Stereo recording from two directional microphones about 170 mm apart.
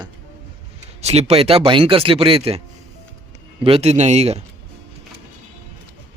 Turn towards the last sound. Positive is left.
turn(degrees=-40)  # may be behind; listen again after turning